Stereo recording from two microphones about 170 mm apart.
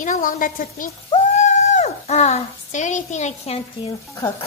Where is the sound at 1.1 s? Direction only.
40° left (ahead or behind).